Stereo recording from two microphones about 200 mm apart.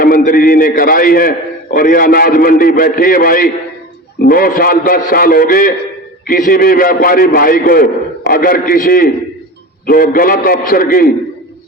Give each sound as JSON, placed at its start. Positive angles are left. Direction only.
{"t": 0.3, "sound": "a man's voice", "side_deg": 45}